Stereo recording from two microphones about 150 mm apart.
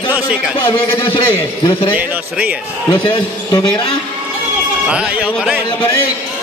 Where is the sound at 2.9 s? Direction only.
30° left (ahead or behind).